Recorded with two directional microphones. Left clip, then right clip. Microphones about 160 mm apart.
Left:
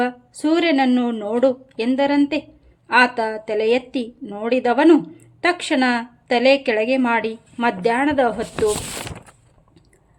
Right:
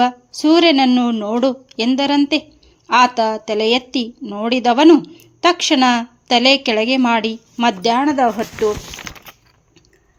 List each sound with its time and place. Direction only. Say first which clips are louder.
0.3 s a woman's voice: right 5 dB; 35° right (ahead or behind)